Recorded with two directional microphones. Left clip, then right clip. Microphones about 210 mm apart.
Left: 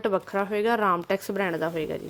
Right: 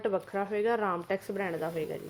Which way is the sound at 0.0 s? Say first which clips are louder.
Left 5 dB; 45° left (ahead or behind).